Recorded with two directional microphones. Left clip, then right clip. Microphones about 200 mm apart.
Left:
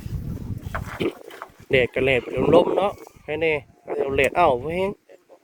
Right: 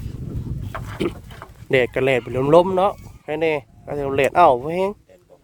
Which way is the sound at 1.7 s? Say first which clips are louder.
Right 2 dB; 30° right (ahead or behind).